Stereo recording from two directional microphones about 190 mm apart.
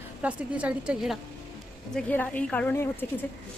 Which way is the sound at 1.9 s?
10° left (ahead or behind).